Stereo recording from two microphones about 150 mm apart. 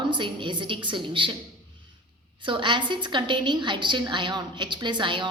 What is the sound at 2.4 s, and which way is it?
A woman's voice, 30° right (ahead or behind).